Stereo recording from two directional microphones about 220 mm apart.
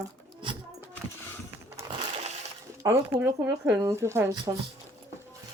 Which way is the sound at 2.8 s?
10° right (ahead or behind).